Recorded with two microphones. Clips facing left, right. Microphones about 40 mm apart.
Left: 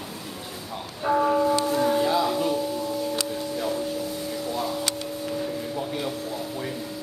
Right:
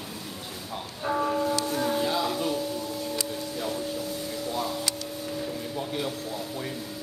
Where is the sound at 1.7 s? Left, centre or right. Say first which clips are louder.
Left 5 dB; centre.